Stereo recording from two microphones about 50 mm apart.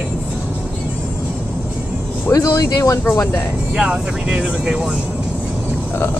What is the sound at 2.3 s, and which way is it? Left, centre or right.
Speech, left.